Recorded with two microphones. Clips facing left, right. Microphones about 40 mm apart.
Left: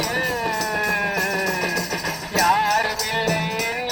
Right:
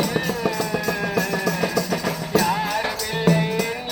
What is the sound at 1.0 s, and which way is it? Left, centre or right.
Music, centre.